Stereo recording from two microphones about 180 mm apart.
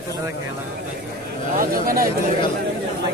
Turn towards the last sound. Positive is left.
turn(degrees=-50)  # may be behind; listen again after turning